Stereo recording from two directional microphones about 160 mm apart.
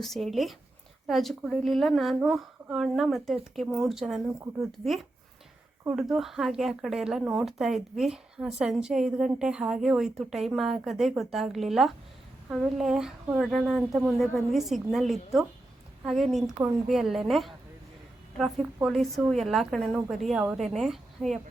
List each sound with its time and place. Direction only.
0.0 s speech: centre (ahead or behind)
6.0 s speech: centre (ahead or behind)
16.6 s speech: 15° right (ahead or behind)
16.9 s speech: centre (ahead or behind)